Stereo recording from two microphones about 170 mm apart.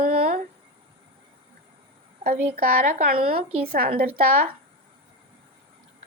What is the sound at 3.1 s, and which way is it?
A woman's voice, 65° right (ahead or behind).